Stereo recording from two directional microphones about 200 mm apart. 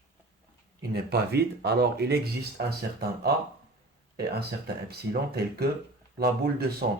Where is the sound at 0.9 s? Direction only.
55° right (ahead or behind).